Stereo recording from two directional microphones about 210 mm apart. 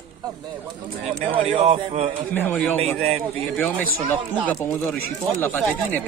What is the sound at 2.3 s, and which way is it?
Speech, 10° left (ahead or behind).